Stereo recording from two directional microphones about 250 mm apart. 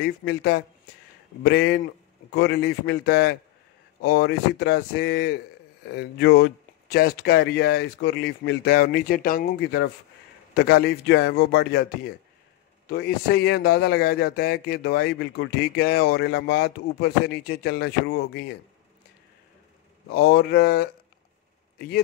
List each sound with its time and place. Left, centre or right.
0.0 s a man's voice: left
20.1 s a man's voice: left